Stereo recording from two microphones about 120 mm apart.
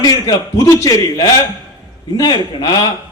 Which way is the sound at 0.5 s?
25° left (ahead or behind).